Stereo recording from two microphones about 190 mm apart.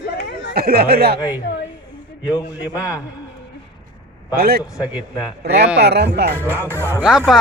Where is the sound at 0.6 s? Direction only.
55° right (ahead or behind).